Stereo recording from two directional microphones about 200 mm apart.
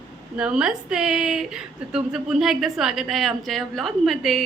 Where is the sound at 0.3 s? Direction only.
5° right (ahead or behind).